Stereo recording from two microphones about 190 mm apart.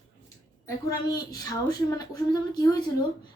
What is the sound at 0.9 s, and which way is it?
A woman's voice, 20° left (ahead or behind).